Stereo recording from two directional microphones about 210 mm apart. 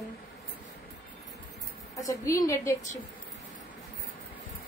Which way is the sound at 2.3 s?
15° left (ahead or behind).